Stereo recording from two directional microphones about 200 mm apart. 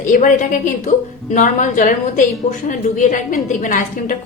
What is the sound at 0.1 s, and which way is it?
A woman's voice, 40° left (ahead or behind).